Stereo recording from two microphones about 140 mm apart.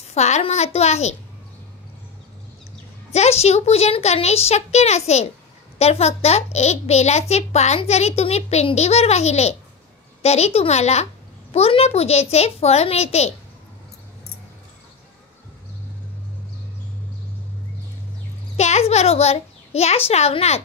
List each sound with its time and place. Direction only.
0.1 s a child's voice: 55° left (ahead or behind)
3.1 s a child's voice: 50° left (ahead or behind)
18.6 s a child's voice: 50° left (ahead or behind)